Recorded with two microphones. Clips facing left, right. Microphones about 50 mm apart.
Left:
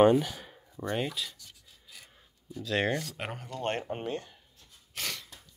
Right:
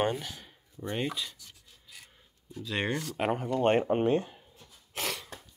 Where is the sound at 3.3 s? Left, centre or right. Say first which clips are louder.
Right 10 dB; centre.